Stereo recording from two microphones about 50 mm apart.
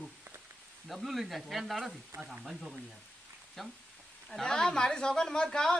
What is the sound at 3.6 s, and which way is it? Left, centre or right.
Speech, centre.